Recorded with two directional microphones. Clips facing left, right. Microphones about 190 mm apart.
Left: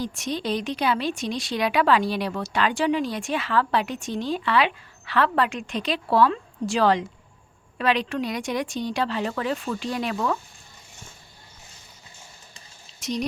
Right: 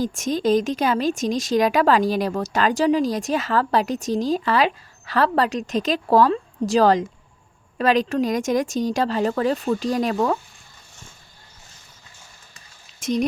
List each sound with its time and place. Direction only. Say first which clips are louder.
0.0 s a woman's voice: right 6 dB; 45° right (ahead or behind)
13.0 s speech: right 6 dB; 50° right (ahead or behind)